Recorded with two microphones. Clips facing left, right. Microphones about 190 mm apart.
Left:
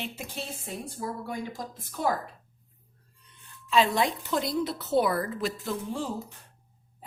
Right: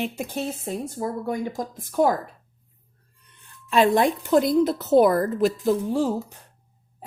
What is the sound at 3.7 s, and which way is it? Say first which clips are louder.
A woman's voice: right 6 dB; 50° right (ahead or behind).